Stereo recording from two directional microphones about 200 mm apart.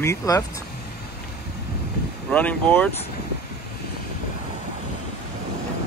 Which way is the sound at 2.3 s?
5° left (ahead or behind).